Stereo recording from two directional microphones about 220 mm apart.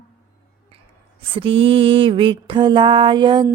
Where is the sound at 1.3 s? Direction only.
25° right (ahead or behind).